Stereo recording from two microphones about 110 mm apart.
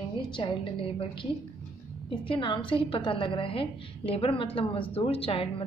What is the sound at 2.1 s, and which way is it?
A woman's voice, 50° left (ahead or behind).